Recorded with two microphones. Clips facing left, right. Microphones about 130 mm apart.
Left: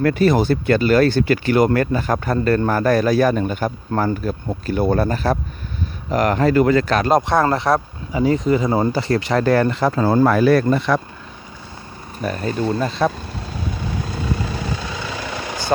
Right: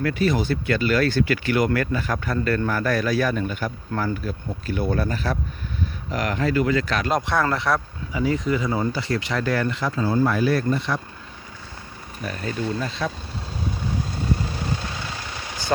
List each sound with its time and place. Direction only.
0.0 s speech: 45° left (ahead or behind); by 11.0 s 75° left (ahead or behind)
12.2 s vehicle: 35° left (ahead or behind); by 15.4 s 90° left